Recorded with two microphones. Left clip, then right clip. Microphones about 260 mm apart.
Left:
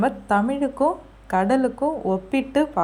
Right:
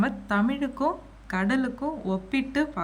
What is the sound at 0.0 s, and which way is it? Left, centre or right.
A woman's voice, centre.